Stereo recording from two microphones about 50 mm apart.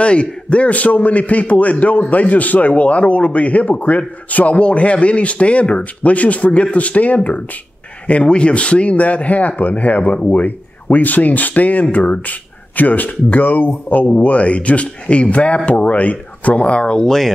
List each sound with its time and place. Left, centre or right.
0.0 s speech: left